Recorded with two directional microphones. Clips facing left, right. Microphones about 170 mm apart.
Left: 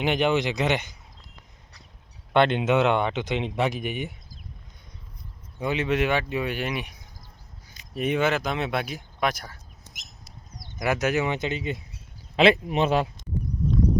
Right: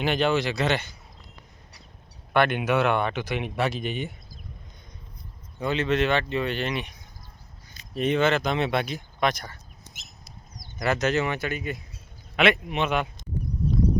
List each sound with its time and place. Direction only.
0.0 s speech: 20° left (ahead or behind)
2.3 s speech: 25° left (ahead or behind)
5.5 s speech: 15° left (ahead or behind)
10.8 s speech: 10° left (ahead or behind); by 13.1 s 35° left (ahead or behind)